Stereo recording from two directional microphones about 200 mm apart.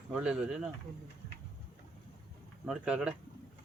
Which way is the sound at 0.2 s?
5° right (ahead or behind).